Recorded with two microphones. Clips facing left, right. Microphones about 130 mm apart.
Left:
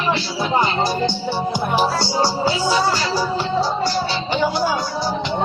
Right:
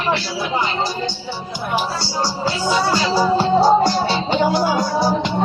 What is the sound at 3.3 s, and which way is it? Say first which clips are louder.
Music: right 7 dB; 40° right (ahead or behind).